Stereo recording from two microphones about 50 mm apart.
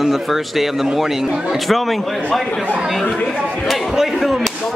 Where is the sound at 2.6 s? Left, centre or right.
Right.